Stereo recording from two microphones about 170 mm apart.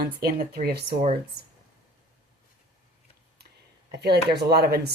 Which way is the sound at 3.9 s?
70° right (ahead or behind).